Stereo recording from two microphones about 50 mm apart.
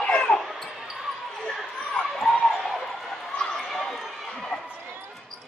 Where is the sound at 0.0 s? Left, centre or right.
Centre.